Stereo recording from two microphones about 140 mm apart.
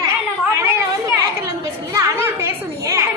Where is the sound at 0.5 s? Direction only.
20° right (ahead or behind).